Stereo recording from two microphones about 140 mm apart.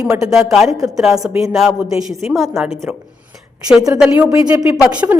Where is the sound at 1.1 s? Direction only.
25° right (ahead or behind).